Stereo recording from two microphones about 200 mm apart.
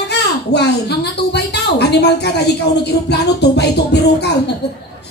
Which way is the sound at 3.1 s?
55° left (ahead or behind).